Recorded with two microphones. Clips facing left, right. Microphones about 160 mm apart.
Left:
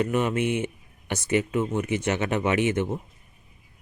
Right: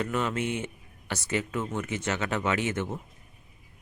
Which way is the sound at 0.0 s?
15° left (ahead or behind).